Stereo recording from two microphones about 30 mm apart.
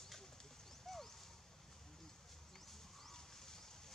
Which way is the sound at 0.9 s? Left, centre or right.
Centre.